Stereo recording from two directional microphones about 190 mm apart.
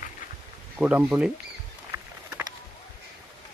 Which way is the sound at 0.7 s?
5° right (ahead or behind).